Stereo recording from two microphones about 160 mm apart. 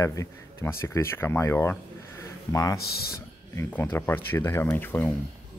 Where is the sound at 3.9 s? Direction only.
15° left (ahead or behind).